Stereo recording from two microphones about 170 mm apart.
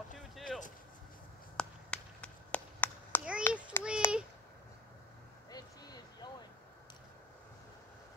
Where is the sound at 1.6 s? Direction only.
5° left (ahead or behind).